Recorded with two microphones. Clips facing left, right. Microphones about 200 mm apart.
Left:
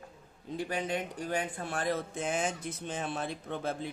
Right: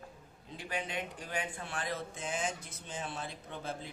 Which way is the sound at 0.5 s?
40° left (ahead or behind).